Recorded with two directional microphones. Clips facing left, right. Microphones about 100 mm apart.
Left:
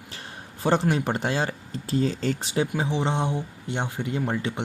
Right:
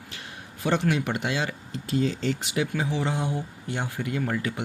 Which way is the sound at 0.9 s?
35° left (ahead or behind).